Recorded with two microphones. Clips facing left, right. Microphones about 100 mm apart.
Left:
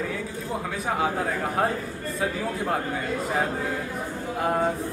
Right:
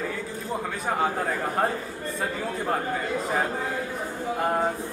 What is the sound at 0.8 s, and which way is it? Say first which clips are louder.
Speech: even; centre (ahead or behind).